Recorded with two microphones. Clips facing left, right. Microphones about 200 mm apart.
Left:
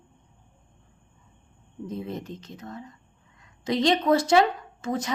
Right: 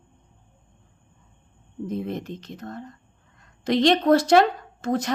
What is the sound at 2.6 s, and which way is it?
Speech, 45° right (ahead or behind).